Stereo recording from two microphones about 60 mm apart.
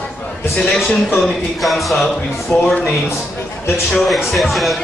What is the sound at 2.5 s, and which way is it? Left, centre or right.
Speech, left.